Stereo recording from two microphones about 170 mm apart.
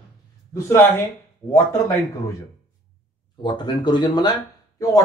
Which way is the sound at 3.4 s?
25° left (ahead or behind).